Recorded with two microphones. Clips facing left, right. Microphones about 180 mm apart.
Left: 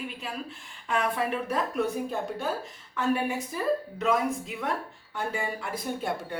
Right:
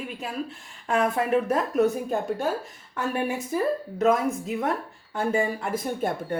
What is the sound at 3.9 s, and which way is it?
Speech, 45° right (ahead or behind).